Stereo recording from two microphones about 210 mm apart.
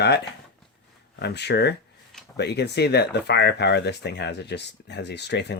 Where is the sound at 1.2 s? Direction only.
55° left (ahead or behind).